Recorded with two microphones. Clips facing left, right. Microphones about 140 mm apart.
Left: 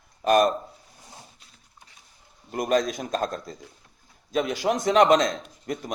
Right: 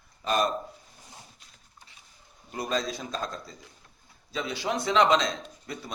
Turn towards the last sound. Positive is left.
turn(degrees=50)  # may be behind; listen again after turning